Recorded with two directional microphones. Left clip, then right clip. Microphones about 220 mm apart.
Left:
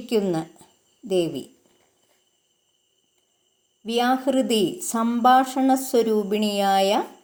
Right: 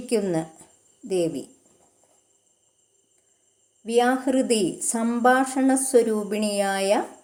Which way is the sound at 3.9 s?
25° left (ahead or behind).